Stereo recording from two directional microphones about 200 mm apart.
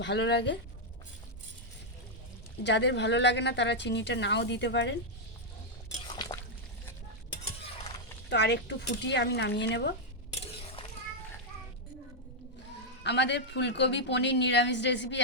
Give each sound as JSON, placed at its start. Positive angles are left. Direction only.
{"t": 0.0, "sound": "a woman's voice", "side_deg": 60}
{"t": 2.6, "sound": "a woman's voice", "side_deg": 60}
{"t": 6.1, "sound": "liquid", "side_deg": 20}
{"t": 8.3, "sound": "a woman's voice", "side_deg": 60}
{"t": 13.0, "sound": "a woman's voice", "side_deg": 60}